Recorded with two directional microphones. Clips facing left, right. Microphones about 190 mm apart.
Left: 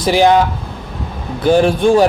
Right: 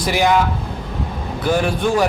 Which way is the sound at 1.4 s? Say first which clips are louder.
Left 7 dB; 30° left (ahead or behind).